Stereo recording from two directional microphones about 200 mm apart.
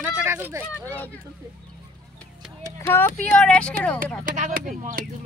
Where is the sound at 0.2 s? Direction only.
10° right (ahead or behind).